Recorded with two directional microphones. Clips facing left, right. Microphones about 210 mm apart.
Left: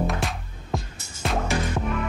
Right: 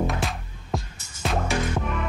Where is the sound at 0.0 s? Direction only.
Centre (ahead or behind).